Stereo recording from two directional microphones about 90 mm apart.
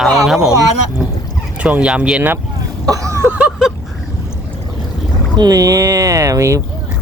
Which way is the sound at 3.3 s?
15° right (ahead or behind).